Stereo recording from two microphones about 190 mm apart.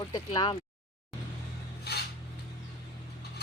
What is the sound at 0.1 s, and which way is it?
Speech, 25° left (ahead or behind).